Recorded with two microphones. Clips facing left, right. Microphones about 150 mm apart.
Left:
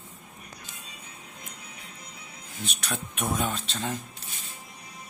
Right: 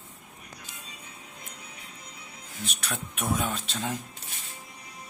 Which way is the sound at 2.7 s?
5° right (ahead or behind).